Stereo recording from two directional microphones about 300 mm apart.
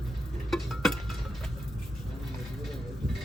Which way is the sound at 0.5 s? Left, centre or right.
Centre.